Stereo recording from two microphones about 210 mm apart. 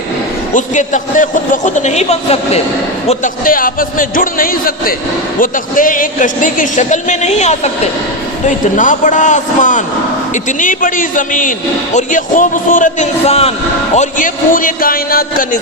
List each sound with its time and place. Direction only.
0.5 s a man's voice: 35° left (ahead or behind)
3.1 s a man's voice: 40° left (ahead or behind)